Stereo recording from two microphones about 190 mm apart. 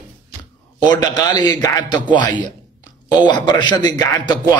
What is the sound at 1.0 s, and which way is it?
A man's voice, 20° left (ahead or behind).